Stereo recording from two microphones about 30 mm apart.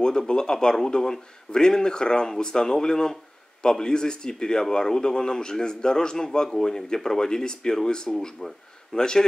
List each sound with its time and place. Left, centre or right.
0.3 s a man's voice: left